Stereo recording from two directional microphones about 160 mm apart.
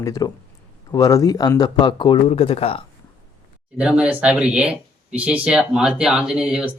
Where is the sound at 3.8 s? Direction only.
5° right (ahead or behind).